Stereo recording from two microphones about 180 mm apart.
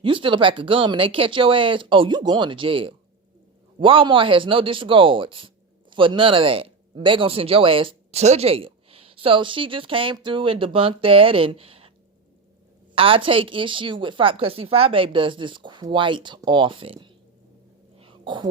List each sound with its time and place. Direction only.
0.0 s speech: 30° right (ahead or behind)
13.0 s speech: 30° right (ahead or behind)
18.0 s a sound: 30° right (ahead or behind)